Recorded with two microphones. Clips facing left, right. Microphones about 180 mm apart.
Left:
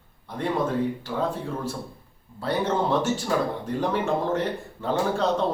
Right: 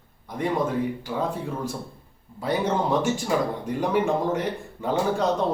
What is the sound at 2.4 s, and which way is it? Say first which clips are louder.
Speech: even; 10° right (ahead or behind).